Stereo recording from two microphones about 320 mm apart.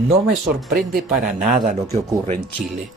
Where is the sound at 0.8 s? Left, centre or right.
Right.